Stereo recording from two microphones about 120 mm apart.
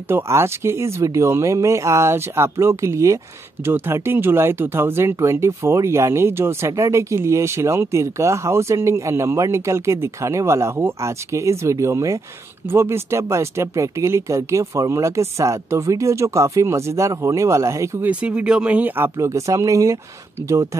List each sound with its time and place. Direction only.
0.1 s speech: 20° right (ahead or behind)
18.0 s speech: 10° right (ahead or behind); by 20.0 s 25° right (ahead or behind)